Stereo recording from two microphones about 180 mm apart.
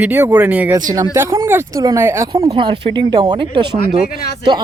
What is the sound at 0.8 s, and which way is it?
Speech, 20° right (ahead or behind).